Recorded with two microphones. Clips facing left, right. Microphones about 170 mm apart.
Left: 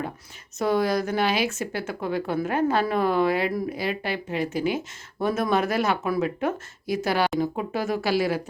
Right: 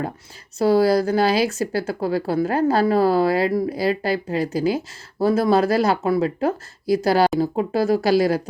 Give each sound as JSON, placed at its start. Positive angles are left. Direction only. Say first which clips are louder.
{"t": 0.6, "sound": "speech", "louder": "right 6 dB", "side_deg": -35}